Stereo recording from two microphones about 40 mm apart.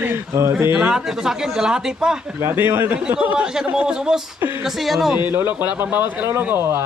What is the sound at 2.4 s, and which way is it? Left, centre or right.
Speech, right.